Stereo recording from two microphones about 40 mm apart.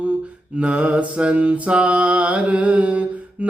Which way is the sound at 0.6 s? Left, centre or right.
Right.